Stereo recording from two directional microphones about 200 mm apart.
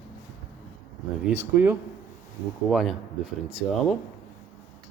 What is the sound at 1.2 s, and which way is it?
Speech, 10° right (ahead or behind).